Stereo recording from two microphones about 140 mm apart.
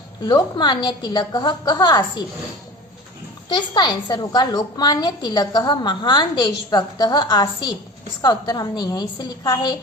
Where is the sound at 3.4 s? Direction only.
30° left (ahead or behind).